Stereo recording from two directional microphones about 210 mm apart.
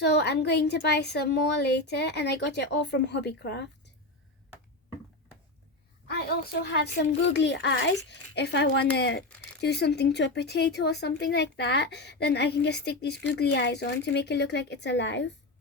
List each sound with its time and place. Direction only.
0.0 s speech: 55° left (ahead or behind)
6.1 s speech: 50° left (ahead or behind)